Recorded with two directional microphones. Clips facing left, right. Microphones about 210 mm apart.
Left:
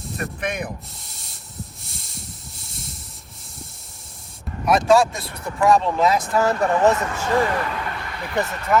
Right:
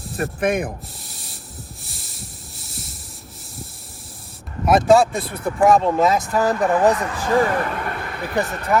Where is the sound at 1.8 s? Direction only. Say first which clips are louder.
Even; centre (ahead or behind).